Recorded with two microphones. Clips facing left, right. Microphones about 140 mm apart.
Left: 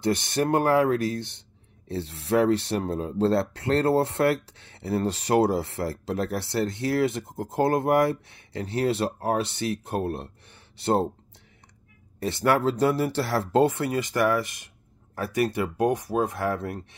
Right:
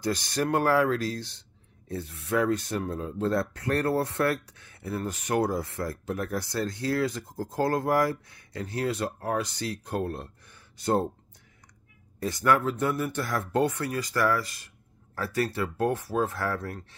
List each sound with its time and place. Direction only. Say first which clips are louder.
0.0 s speech: left 4 dB; 25° left (ahead or behind)
12.2 s speech: left 2 dB; 25° left (ahead or behind)